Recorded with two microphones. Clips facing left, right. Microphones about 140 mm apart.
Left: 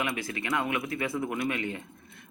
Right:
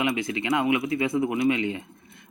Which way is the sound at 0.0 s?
20° right (ahead or behind).